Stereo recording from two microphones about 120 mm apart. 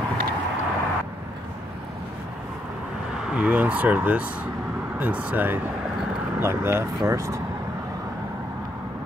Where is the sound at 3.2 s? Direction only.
10° right (ahead or behind); by 7.4 s 25° right (ahead or behind).